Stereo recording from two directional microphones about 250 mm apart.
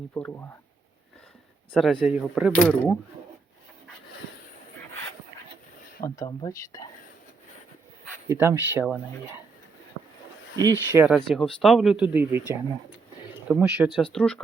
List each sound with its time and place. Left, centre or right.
0.1 s speech: centre
1.7 s speech: centre
6.1 s speech: centre
8.3 s speech: centre
10.6 s speech: centre
13.5 s speech: centre